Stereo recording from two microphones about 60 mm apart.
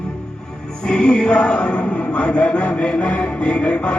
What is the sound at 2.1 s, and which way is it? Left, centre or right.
Chant, left.